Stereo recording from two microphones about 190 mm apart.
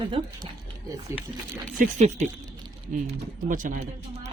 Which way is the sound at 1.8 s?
35° right (ahead or behind).